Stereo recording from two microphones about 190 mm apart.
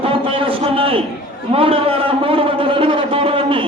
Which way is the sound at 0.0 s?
30° right (ahead or behind).